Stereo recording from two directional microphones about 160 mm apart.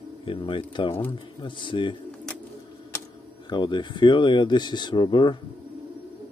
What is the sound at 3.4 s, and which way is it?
Speech, 30° left (ahead or behind).